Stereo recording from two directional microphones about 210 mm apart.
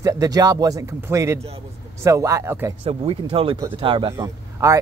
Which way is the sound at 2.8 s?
25° right (ahead or behind).